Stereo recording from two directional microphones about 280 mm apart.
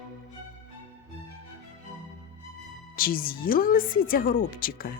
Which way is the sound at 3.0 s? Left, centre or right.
Left.